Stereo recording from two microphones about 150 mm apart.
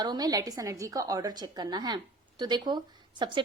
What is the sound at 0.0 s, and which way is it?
A woman's voice, 25° right (ahead or behind).